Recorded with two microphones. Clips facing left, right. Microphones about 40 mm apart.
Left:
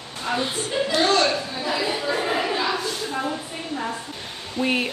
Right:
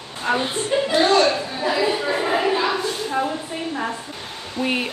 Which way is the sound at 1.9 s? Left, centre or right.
Centre.